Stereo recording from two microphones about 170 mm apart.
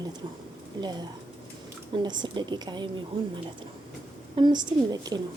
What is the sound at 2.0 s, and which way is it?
Speech, 25° right (ahead or behind).